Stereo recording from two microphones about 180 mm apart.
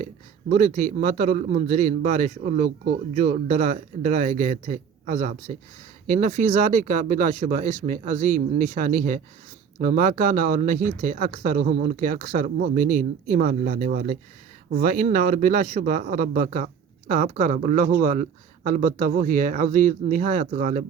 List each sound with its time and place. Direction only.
0.5 s a man's voice: 45° right (ahead or behind)